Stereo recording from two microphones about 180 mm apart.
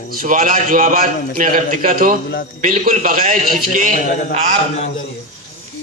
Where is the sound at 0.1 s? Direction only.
50° right (ahead or behind).